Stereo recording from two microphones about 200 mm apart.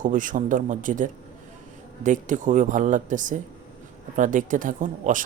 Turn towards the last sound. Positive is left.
turn(degrees=-40)  # may be behind; listen again after turning